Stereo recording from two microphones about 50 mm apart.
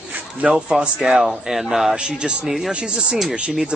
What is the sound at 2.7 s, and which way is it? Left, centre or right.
Speech, centre.